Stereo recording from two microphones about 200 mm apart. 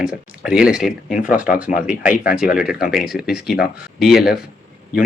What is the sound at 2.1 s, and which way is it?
Speech, 45° left (ahead or behind).